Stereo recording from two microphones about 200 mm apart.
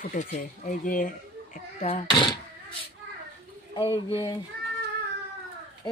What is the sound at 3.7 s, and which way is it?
Speech, 25° left (ahead or behind).